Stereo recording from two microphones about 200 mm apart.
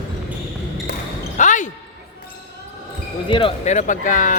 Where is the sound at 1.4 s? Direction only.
40° left (ahead or behind).